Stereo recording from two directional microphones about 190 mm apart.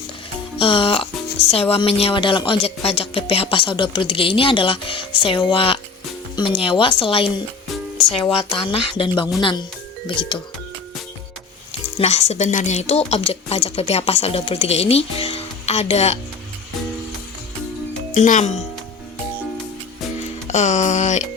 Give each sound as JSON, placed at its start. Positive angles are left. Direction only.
{"t": 0.6, "sound": "speech", "side_deg": 30}
{"t": 11.9, "sound": "a woman's voice", "side_deg": 35}
{"t": 18.1, "sound": "speech", "side_deg": 40}
{"t": 20.5, "sound": "a woman's voice", "side_deg": 40}